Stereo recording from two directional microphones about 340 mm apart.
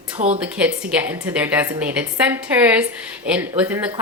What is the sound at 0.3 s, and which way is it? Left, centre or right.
Speech, centre.